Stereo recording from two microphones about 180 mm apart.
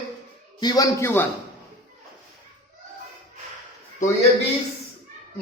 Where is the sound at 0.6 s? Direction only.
20° left (ahead or behind).